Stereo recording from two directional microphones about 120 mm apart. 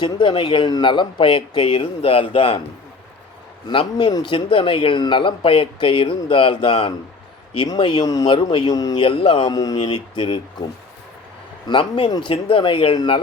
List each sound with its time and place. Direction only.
0.0 s speech: 45° left (ahead or behind)
3.7 s speech: 45° left (ahead or behind)
8.0 s a man's voice: 30° left (ahead or behind)
8.3 s a man's voice: 45° left (ahead or behind)
9.0 s speech: 45° left (ahead or behind)
9.5 s a man's voice: 35° left (ahead or behind)
11.7 s speech: 45° left (ahead or behind)